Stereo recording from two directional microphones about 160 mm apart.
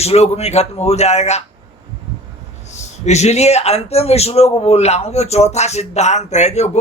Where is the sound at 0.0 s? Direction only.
40° left (ahead or behind).